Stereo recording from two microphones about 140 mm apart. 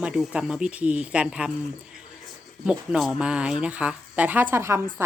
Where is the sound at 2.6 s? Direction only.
5° right (ahead or behind).